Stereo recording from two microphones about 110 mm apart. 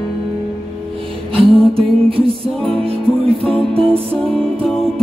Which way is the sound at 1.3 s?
55° right (ahead or behind).